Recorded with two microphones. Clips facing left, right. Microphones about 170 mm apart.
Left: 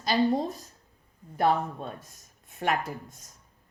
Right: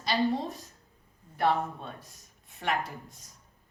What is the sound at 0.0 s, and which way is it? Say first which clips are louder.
Speech: left 3 dB; 40° left (ahead or behind).